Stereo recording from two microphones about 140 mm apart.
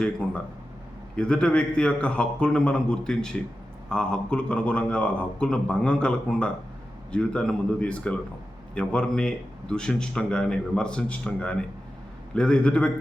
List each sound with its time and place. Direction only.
1.1 s a man's voice: 5° left (ahead or behind)